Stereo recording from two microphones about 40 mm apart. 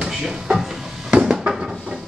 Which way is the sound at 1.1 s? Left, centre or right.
Right.